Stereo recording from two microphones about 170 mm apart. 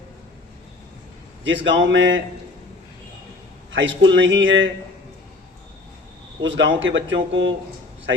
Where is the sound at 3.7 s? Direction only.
90° right.